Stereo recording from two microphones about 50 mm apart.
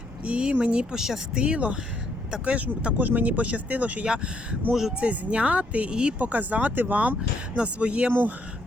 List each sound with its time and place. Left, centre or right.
0.3 s speech: right
0.9 s speech: centre
1.4 s speech: right
4.0 s speech: centre
4.9 s speech: right
6.1 s speech: right
7.2 s speech: right